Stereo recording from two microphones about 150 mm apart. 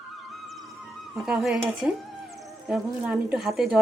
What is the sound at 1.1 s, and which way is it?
Speech, 5° right (ahead or behind).